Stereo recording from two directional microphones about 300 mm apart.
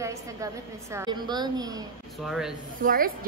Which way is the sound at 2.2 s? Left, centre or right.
Centre.